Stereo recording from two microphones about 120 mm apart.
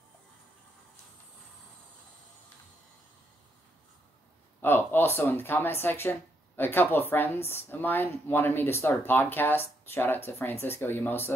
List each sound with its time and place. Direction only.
4.6 s speech: 15° left (ahead or behind)